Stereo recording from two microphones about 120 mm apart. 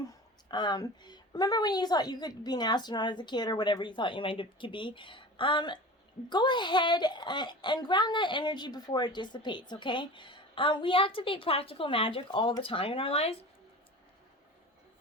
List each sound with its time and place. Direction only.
0.0 s a woman's voice: 35° left (ahead or behind); by 13.3 s 55° left (ahead or behind)